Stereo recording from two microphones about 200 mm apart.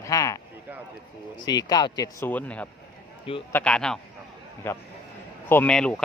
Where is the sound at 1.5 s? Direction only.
20° left (ahead or behind).